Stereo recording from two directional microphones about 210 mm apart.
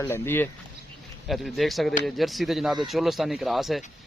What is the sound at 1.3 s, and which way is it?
Speech, centre (ahead or behind).